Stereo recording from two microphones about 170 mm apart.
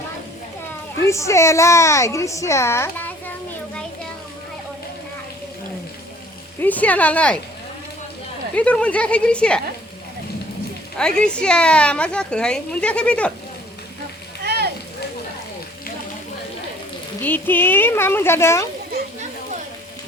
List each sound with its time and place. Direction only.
1.0 s a woman's voice: 15° left (ahead or behind)
6.6 s a woman's voice: 10° left (ahead or behind)
8.5 s a woman's voice: 5° left (ahead or behind)
11.3 s a woman's voice: 5° left (ahead or behind)
14.4 s a sound: 70° right (ahead or behind)
17.2 s a woman's voice: 10° left (ahead or behind)